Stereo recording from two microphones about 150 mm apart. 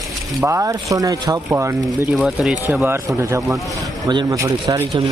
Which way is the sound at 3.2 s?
20° right (ahead or behind).